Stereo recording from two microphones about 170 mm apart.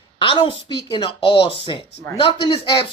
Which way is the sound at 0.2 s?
30° left (ahead or behind).